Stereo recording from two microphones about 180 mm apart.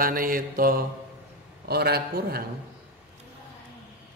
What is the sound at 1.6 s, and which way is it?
Speech, 60° right (ahead or behind).